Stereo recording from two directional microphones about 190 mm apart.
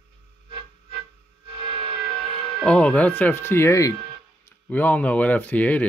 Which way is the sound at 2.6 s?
5° left (ahead or behind).